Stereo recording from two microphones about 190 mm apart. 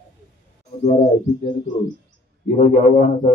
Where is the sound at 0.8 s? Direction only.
40° left (ahead or behind).